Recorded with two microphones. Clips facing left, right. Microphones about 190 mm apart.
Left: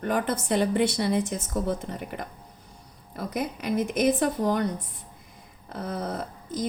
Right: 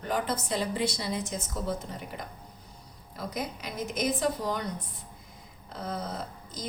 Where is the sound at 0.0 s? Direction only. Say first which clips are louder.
Left 4 dB; 60° left (ahead or behind).